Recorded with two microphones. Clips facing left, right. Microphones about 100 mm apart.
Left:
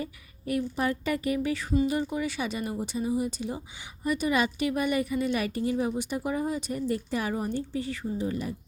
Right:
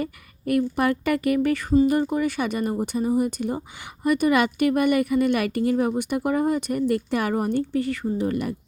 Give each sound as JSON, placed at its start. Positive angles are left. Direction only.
{"t": 0.0, "sound": "a woman's voice", "side_deg": -60}